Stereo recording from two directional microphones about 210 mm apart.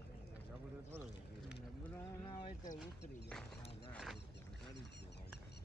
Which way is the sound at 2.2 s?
25° left (ahead or behind).